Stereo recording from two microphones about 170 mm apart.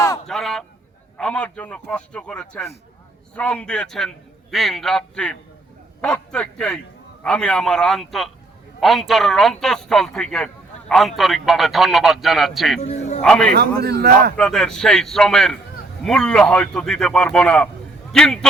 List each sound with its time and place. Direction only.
0.3 s a man's voice: centre (ahead or behind)
12.8 s a man's voice: 40° left (ahead or behind)
13.2 s a man's voice: 5° left (ahead or behind)
13.5 s speech: 70° right (ahead or behind)
14.3 s a man's voice: 5° left (ahead or behind)